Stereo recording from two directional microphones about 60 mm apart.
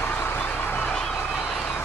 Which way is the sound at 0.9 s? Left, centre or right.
Centre.